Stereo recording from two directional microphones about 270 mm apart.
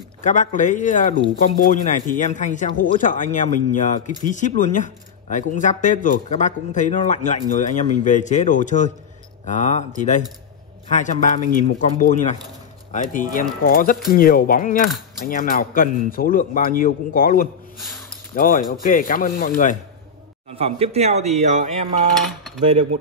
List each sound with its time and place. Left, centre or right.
0.2 s speech: left
10.9 s a man's voice: left
20.5 s speech: right